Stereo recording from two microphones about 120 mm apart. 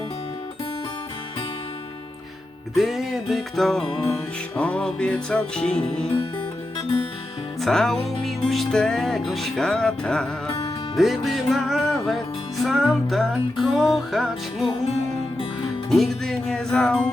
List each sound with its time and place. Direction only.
2.7 s music: centre (ahead or behind)
7.6 s music: 5° left (ahead or behind)
15.9 s music: 5° left (ahead or behind)